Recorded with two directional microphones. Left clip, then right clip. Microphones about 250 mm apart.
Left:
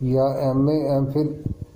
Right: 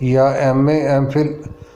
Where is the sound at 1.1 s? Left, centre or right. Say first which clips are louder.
Right 6 dB; right.